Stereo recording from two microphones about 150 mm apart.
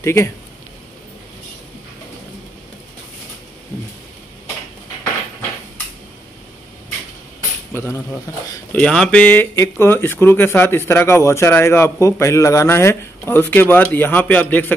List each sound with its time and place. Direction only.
0.0 s speech: 20° left (ahead or behind)
7.7 s speech: 15° left (ahead or behind)
8.7 s speech: 5° left (ahead or behind)